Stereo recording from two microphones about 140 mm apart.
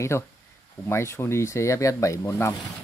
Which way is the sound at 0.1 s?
15° left (ahead or behind).